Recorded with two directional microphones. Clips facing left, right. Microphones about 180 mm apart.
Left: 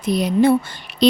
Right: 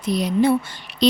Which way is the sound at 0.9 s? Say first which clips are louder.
Left 3 dB; 50° left (ahead or behind).